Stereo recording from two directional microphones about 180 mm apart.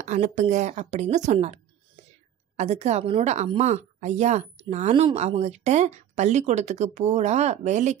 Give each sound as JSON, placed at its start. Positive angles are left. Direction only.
{"t": 0.0, "sound": "speech", "side_deg": -45}